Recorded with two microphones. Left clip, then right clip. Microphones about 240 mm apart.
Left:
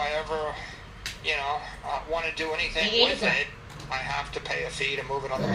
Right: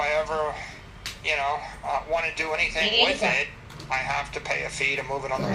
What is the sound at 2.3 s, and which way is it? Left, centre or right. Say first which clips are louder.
Speech: right 3 dB; right.